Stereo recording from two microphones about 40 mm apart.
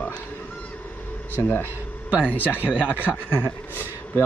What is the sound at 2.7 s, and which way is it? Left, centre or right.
A man's voice, left.